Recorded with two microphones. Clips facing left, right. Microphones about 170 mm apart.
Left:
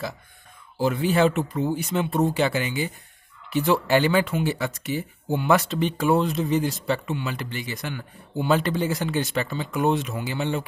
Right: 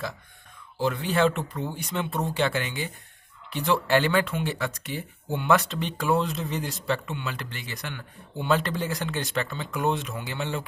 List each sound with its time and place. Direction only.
0.7 s speech: 5° left (ahead or behind)